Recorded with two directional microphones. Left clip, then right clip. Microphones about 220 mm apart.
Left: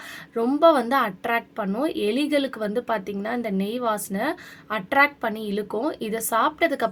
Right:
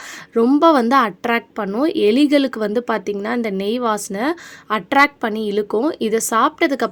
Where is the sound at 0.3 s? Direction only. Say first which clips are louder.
Right 5 dB; 35° right (ahead or behind).